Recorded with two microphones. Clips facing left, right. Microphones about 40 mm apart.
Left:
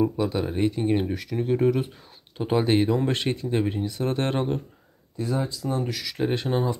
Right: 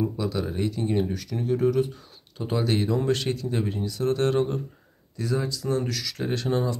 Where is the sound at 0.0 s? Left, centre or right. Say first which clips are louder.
Left 3 dB; left.